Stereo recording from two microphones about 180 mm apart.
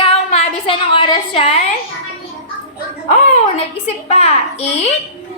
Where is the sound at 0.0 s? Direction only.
35° left (ahead or behind).